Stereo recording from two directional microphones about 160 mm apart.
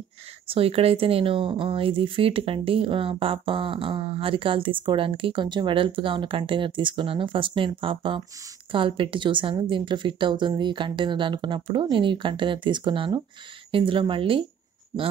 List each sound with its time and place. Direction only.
0.5 s speech: 35° right (ahead or behind)